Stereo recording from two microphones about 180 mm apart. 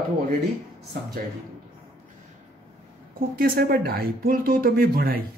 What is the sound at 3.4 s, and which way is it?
Speech, 60° right (ahead or behind).